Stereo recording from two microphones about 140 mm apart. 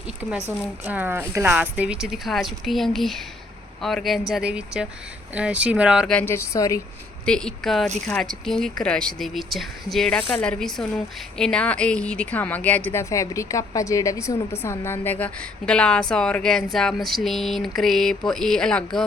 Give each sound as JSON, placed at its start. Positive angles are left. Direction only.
{"t": 0.9, "sound": "a woman's voice", "side_deg": -15}
{"t": 6.1, "sound": "speech", "side_deg": 10}
{"t": 7.3, "sound": "a woman's voice", "side_deg": 5}